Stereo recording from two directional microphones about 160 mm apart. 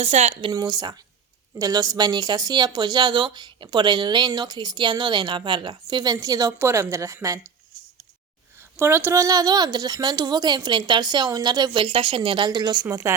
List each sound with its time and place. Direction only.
0.0 s speech: 40° right (ahead or behind)
0.5 s a woman's voice: 25° right (ahead or behind)
8.7 s a woman's voice: 15° right (ahead or behind)